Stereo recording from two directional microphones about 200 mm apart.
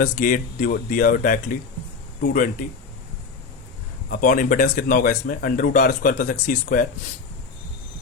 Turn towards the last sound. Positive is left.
turn(degrees=40)  # may be behind; listen again after turning